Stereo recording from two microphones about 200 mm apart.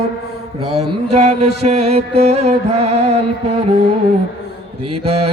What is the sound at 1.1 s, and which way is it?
Mantra, 35° right (ahead or behind).